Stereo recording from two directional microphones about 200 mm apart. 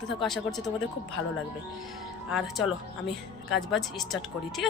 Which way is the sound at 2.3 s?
Centre (ahead or behind).